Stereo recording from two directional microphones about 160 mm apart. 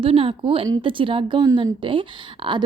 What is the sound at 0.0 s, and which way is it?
A woman's voice, 35° right (ahead or behind).